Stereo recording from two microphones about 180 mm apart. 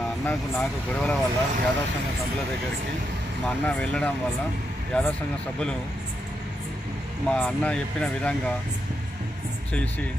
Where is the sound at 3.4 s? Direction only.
5° left (ahead or behind).